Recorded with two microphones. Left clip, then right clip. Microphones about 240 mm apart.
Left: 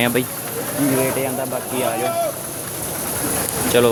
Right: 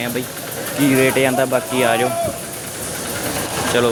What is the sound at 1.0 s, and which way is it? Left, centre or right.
Speech, right.